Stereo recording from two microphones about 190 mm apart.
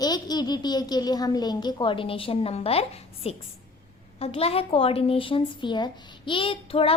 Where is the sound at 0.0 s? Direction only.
20° left (ahead or behind).